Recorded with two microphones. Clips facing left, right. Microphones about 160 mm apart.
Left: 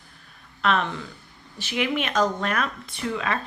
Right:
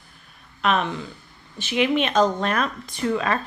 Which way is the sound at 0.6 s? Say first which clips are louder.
Right 1 dB; 15° right (ahead or behind).